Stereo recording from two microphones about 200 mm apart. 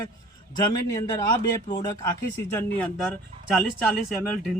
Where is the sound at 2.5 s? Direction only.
5° left (ahead or behind).